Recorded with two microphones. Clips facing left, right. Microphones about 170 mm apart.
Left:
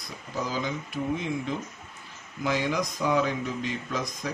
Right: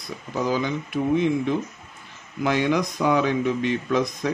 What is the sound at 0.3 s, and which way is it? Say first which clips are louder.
Speech: right 6 dB; 60° right (ahead or behind).